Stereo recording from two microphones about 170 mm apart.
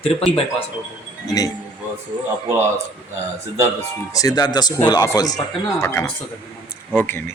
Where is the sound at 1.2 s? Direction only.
20° left (ahead or behind).